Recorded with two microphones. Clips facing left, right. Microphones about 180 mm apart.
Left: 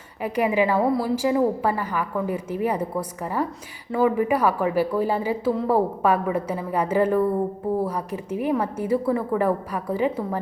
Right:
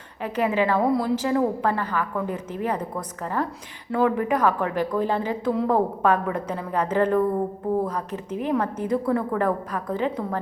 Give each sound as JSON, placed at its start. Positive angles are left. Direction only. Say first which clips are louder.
{"t": 0.2, "sound": "a woman's voice", "louder": "left 2 dB", "side_deg": 10}